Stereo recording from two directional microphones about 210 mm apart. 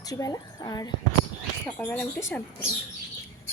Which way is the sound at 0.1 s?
15° left (ahead or behind).